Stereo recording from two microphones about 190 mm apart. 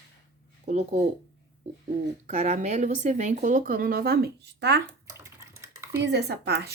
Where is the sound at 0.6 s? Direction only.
35° right (ahead or behind).